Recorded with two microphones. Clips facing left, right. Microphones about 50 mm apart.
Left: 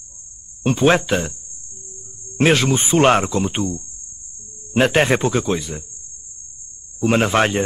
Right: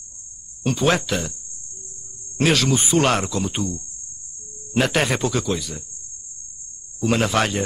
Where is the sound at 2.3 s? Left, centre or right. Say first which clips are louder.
Left 3 dB; left.